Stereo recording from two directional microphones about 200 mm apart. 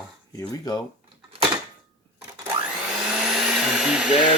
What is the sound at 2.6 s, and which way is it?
Vacuum cleaner, 5° right (ahead or behind).